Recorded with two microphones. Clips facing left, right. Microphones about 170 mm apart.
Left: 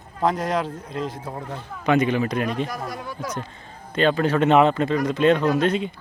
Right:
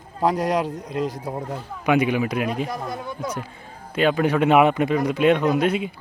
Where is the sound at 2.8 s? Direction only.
25° right (ahead or behind).